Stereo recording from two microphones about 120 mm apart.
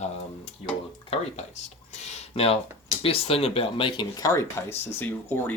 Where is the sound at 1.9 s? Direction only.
60° left (ahead or behind).